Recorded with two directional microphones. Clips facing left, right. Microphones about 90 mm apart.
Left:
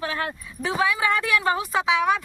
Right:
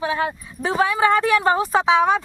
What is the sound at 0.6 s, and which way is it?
Speech, 35° right (ahead or behind).